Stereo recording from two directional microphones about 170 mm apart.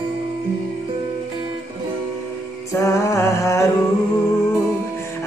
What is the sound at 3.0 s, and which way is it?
Music, 15° left (ahead or behind).